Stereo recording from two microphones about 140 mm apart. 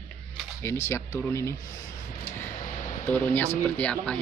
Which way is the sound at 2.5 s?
65° left (ahead or behind).